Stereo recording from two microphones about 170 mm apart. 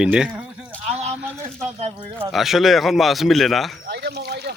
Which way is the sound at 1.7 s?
40° right (ahead or behind).